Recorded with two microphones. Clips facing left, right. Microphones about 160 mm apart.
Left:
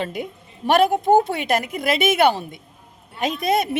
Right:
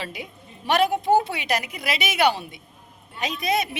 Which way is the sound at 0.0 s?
50° left (ahead or behind).